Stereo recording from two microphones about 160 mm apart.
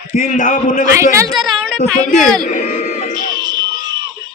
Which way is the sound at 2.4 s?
55° left (ahead or behind).